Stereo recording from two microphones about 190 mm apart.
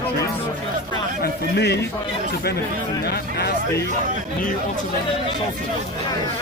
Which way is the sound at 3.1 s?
55° left (ahead or behind).